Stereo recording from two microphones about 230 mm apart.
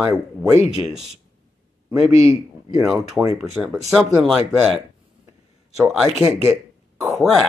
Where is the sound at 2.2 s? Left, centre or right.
Centre.